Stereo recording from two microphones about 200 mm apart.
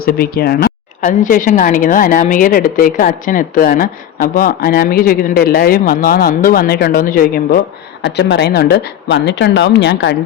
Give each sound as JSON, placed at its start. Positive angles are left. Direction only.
{"t": 0.0, "sound": "speech", "side_deg": 50}
{"t": 8.0, "sound": "a woman's voice", "side_deg": 60}